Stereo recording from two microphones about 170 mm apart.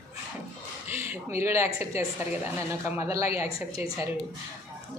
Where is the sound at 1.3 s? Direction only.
15° right (ahead or behind).